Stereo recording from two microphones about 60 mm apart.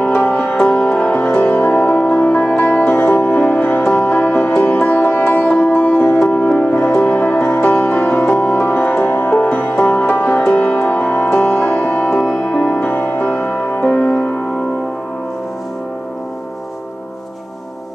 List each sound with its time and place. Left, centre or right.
0.3 s music: left
9.5 s music: left
11.3 s sitar: left
12.2 s music: centre
13.9 s music: centre